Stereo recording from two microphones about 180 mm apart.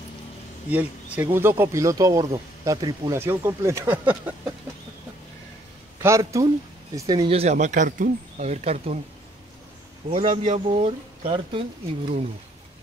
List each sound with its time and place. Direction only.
0.7 s speech: 10° right (ahead or behind)
6.0 s speech: 15° right (ahead or behind)
7.3 s speech: 40° right (ahead or behind)
10.0 s speech: 35° right (ahead or behind)